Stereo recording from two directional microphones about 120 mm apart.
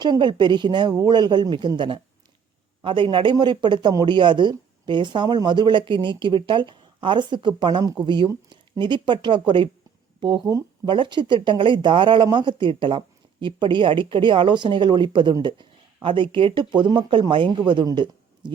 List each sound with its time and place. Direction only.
0.0 s a man's voice: 40° right (ahead or behind)